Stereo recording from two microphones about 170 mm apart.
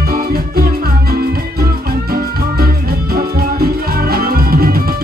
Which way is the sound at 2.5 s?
60° right (ahead or behind).